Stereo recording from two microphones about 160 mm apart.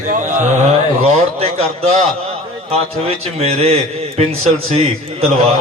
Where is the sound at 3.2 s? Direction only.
40° right (ahead or behind).